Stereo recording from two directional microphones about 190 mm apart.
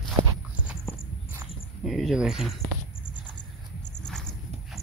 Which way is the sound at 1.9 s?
Centre (ahead or behind).